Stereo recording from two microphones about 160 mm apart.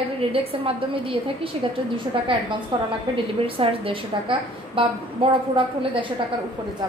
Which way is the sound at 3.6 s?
35° right (ahead or behind).